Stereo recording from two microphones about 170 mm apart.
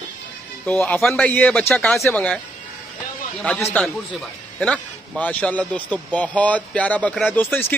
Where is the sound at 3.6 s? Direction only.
5° left (ahead or behind).